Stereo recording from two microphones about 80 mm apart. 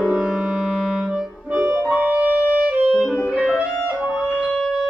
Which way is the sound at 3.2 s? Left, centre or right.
Centre.